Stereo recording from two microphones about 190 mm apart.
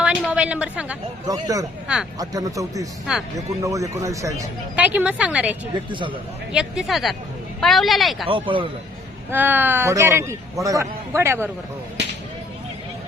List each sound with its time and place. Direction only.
0.0 s a woman's voice: 5° right (ahead or behind)
1.3 s speech: 20° right (ahead or behind)
5.7 s speech: 25° right (ahead or behind)
6.5 s speech: 5° right (ahead or behind)
8.3 s speech: 25° right (ahead or behind)
9.3 s speech: 10° right (ahead or behind)